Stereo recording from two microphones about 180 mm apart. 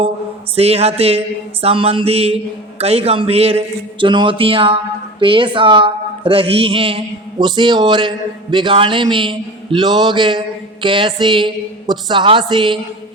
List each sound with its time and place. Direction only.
0.5 s a man's voice: 35° right (ahead or behind)